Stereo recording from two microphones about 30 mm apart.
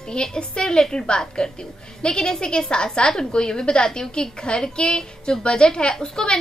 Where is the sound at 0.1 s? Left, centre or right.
Left.